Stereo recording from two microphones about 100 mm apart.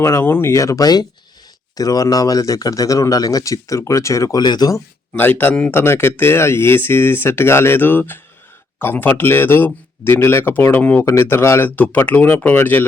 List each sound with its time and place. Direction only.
0.0 s speech: 25° left (ahead or behind)
0.5 s speech: 35° left (ahead or behind)
5.1 s speech: 20° left (ahead or behind)